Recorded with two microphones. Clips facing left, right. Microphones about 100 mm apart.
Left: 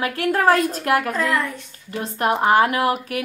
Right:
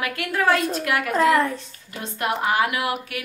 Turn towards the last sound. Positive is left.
turn(degrees=40)  # may be behind; listen again after turning